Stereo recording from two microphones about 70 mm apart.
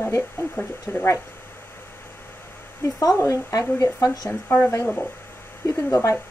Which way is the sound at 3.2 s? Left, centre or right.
Left.